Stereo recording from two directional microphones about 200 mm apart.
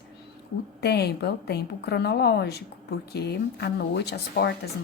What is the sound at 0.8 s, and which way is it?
A woman's voice, 55° left (ahead or behind).